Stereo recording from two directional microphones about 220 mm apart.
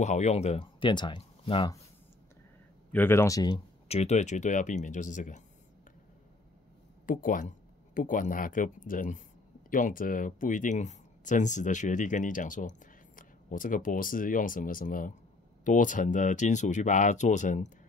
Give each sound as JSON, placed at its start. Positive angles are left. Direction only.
{"t": 0.0, "sound": "speech", "side_deg": 35}
{"t": 2.9, "sound": "speech", "side_deg": 10}
{"t": 7.1, "sound": "speech", "side_deg": 35}